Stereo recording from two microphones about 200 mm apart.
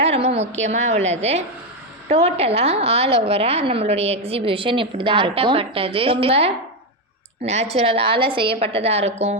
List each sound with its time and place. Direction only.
0.0 s a woman's voice: 30° right (ahead or behind)